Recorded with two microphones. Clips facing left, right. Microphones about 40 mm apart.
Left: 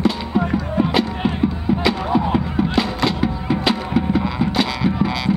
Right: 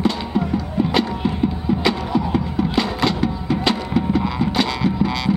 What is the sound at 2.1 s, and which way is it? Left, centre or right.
Music, centre.